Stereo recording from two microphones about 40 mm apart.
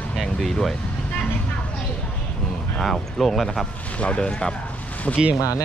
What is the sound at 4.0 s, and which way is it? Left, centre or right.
Speech, left.